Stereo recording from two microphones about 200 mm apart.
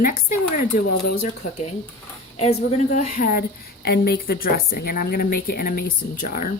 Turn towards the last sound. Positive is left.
turn(degrees=45)  # may be behind; listen again after turning